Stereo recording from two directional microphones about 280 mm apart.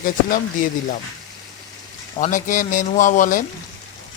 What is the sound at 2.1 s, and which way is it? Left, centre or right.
Speech, left.